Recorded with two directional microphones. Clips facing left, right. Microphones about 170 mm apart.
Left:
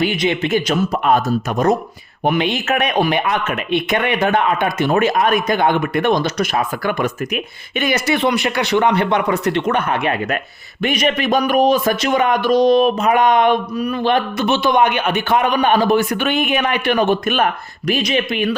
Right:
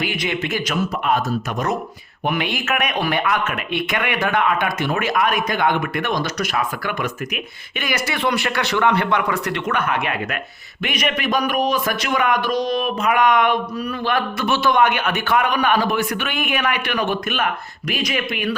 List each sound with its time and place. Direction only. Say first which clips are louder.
0.0 s a man's voice: left 6 dB; 25° left (ahead or behind)
2.2 s a man's voice: left 5 dB; 25° left (ahead or behind)
13.7 s a man's voice: left 5 dB; 15° left (ahead or behind)